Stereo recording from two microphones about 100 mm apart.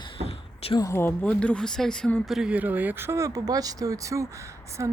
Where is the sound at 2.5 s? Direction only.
15° right (ahead or behind).